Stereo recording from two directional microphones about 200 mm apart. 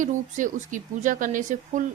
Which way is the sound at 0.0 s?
40° right (ahead or behind).